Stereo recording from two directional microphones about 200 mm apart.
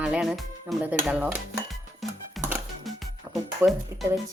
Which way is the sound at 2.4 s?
Centre (ahead or behind).